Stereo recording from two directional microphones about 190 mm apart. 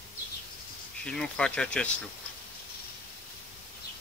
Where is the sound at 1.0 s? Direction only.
5° left (ahead or behind).